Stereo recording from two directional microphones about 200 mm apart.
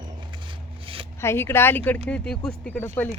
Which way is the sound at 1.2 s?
10° left (ahead or behind).